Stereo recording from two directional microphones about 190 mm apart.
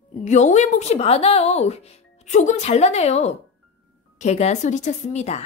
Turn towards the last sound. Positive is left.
turn(degrees=35)  # may be behind; listen again after turning